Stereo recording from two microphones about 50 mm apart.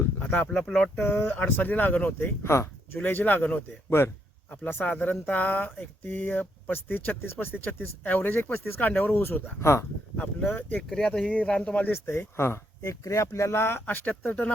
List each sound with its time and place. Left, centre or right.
0.0 s a sound: left
0.5 s speech: centre
1.0 s speech: left
2.4 s speech: left
3.0 s speech: left
3.8 s speech: left
4.6 s speech: left
9.6 s speech: left
10.5 s speech: left
10.8 s speech: centre
11.4 s speech: centre
11.9 s speech: left
13.1 s speech: left
13.8 s speech: left